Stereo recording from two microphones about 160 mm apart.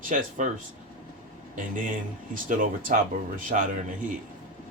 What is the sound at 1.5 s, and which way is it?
Speech, 55° right (ahead or behind).